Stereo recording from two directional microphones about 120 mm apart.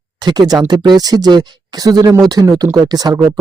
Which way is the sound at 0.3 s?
35° right (ahead or behind).